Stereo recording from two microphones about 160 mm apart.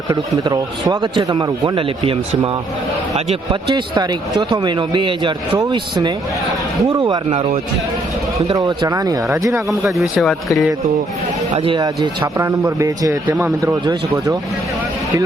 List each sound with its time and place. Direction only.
0.1 s speech: 25° right (ahead or behind)
8.5 s speech: 20° right (ahead or behind)
9.6 s speech: centre (ahead or behind)
11.5 s speech: 35° right (ahead or behind)
12.4 s speech: 20° right (ahead or behind)